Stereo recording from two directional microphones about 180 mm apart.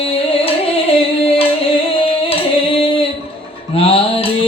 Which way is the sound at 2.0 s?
30° left (ahead or behind).